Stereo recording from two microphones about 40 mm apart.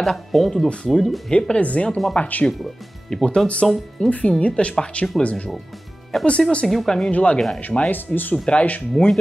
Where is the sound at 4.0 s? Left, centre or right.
Left.